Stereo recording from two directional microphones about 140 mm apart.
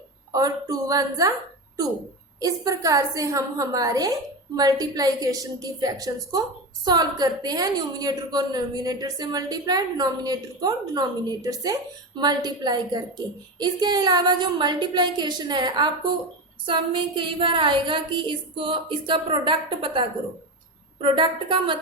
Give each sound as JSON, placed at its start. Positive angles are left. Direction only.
{"t": 0.3, "sound": "a woman's voice", "side_deg": -25}
{"t": 2.4, "sound": "a woman's voice", "side_deg": -25}